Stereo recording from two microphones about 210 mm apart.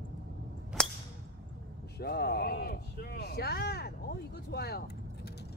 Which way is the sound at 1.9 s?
50° left (ahead or behind).